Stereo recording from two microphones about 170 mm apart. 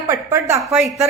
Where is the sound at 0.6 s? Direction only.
Centre (ahead or behind).